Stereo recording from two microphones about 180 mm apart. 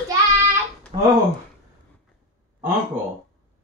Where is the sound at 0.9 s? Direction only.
35° right (ahead or behind).